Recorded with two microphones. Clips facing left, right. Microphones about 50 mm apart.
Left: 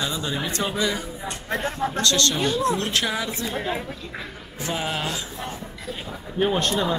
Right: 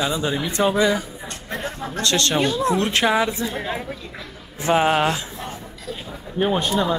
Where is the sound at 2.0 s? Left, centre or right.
Right.